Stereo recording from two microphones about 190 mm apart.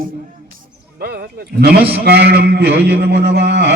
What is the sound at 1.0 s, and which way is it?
A man's voice, 55° right (ahead or behind).